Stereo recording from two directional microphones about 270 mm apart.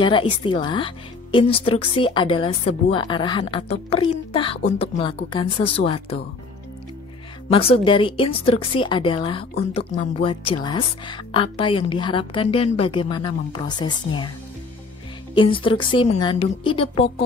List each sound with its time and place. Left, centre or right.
0.0 s a woman's voice: centre
7.5 s a woman's voice: centre
15.3 s a woman's voice: centre